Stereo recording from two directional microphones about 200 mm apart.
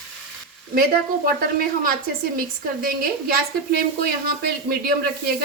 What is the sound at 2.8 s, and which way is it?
A woman's voice, 45° right (ahead or behind).